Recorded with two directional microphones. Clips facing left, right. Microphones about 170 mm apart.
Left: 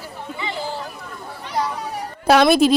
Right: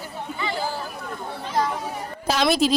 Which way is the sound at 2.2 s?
60° left (ahead or behind).